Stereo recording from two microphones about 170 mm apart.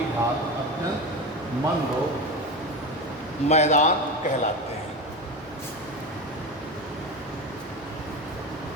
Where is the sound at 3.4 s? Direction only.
40° left (ahead or behind).